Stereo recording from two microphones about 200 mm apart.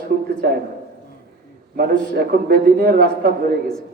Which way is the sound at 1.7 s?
50° right (ahead or behind).